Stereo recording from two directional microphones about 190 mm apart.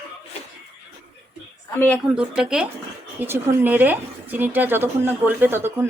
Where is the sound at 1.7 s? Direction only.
10° left (ahead or behind).